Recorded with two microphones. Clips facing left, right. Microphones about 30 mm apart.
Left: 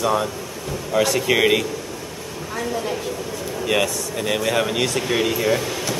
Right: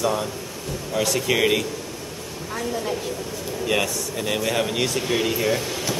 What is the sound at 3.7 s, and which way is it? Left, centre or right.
Speech, centre.